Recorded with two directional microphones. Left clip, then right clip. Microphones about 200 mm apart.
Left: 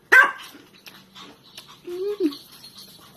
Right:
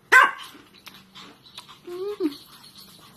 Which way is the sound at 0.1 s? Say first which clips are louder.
Left 1 dB; 20° left (ahead or behind).